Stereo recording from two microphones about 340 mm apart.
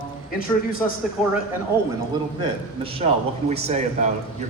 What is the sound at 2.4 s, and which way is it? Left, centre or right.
A man's voice, centre.